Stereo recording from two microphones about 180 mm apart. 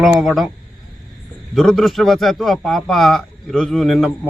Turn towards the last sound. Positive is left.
turn(degrees=0)  # may be behind; listen again after turning